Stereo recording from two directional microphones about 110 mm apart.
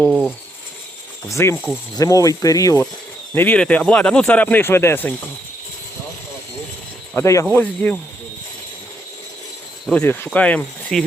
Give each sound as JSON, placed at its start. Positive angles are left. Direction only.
{"t": 0.1, "sound": "speech", "side_deg": -10}
{"t": 1.3, "sound": "speech", "side_deg": 25}
{"t": 3.3, "sound": "speech", "side_deg": 15}
{"t": 7.1, "sound": "speech", "side_deg": 25}
{"t": 7.5, "sound": "speech", "side_deg": 15}
{"t": 9.9, "sound": "speech", "side_deg": 15}